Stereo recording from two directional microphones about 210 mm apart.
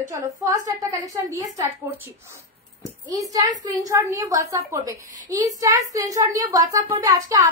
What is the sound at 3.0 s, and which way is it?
A child's voice, 15° right (ahead or behind).